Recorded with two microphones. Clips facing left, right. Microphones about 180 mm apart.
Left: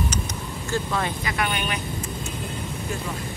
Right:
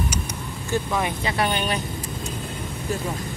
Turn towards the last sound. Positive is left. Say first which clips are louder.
# right 3 dB
turn(degrees=-35)  # may be behind; listen again after turning